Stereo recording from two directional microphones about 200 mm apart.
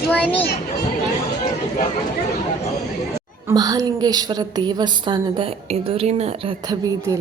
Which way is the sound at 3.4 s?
20° right (ahead or behind).